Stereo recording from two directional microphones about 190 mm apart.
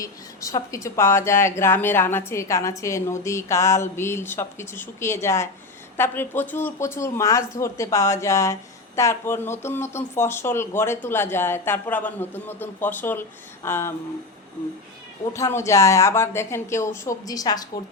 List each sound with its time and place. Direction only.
0.0 s speech: 15° left (ahead or behind)
15.3 s speech: 15° left (ahead or behind)